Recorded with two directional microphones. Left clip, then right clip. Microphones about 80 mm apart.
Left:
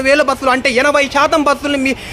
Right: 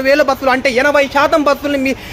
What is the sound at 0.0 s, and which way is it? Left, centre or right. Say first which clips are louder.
A man's voice: even; left.